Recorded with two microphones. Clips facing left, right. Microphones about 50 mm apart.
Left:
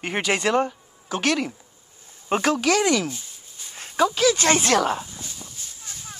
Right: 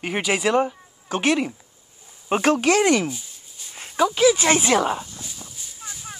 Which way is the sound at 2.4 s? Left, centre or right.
Right.